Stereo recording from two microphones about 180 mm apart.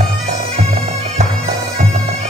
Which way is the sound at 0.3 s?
35° right (ahead or behind).